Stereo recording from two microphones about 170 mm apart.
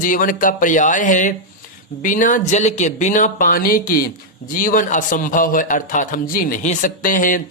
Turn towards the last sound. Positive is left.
turn(degrees=50)  # may be behind; listen again after turning